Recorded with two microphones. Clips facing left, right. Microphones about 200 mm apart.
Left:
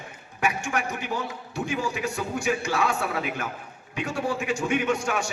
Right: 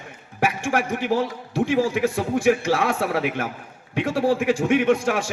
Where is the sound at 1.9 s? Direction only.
60° right (ahead or behind).